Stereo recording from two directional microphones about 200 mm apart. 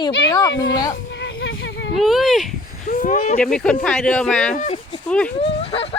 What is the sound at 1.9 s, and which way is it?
Speech, centre (ahead or behind).